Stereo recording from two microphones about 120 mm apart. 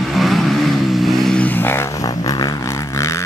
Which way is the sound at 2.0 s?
30° left (ahead or behind).